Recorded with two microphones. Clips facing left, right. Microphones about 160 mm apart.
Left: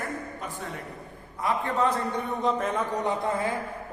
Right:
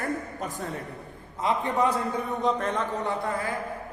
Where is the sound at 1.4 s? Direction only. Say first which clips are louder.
Right 1 dB; 15° right (ahead or behind).